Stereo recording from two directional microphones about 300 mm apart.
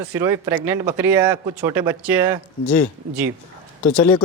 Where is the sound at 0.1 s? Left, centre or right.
Centre.